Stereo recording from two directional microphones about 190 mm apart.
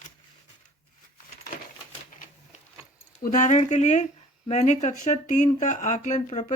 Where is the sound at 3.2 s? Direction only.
45° left (ahead or behind).